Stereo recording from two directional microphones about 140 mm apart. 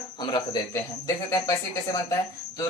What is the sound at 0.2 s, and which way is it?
Speech, 30° left (ahead or behind).